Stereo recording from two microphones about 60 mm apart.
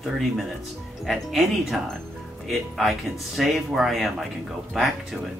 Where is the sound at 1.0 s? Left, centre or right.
Centre.